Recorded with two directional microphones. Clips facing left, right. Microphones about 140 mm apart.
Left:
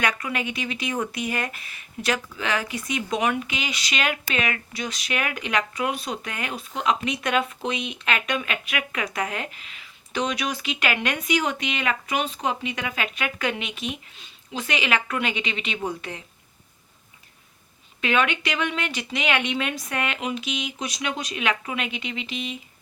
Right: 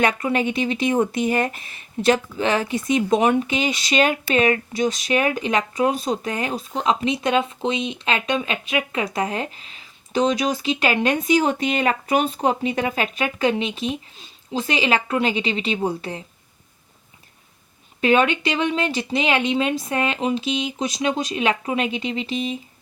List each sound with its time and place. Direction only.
0.0 s speech: 25° right (ahead or behind)
18.0 s speech: 35° right (ahead or behind)